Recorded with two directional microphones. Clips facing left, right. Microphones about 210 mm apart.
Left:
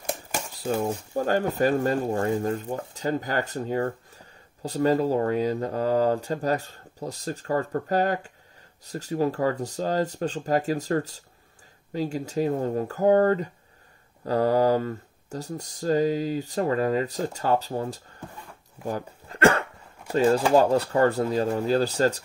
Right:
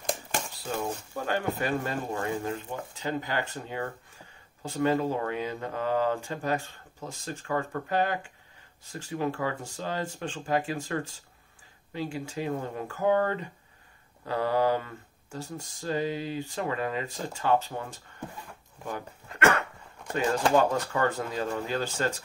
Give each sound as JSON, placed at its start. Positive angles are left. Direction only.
{"t": 0.6, "sound": "speech", "side_deg": 40}
{"t": 18.9, "sound": "a sound", "side_deg": 35}
{"t": 20.1, "sound": "speech", "side_deg": 35}